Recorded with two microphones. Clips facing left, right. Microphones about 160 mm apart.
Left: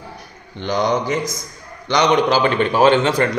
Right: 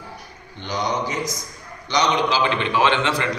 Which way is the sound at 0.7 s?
55° left (ahead or behind).